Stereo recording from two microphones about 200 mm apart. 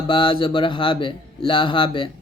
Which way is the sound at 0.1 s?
25° left (ahead or behind).